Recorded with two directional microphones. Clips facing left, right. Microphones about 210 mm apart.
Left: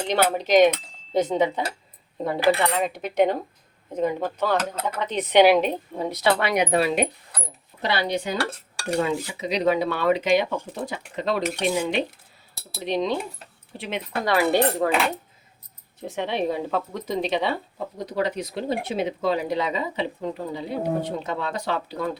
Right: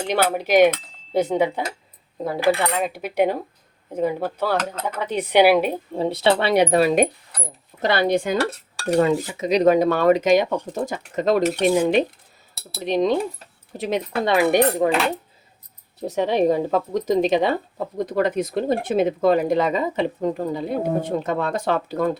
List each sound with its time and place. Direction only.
0.1 s cutlery: 10° right (ahead or behind)
4.5 s speech: 10° left (ahead or behind)
4.9 s cutlery: 10° right (ahead or behind)
5.9 s speech: 30° right (ahead or behind)
14.3 s speech: 20° right (ahead or behind)
16.0 s speech: 40° right (ahead or behind)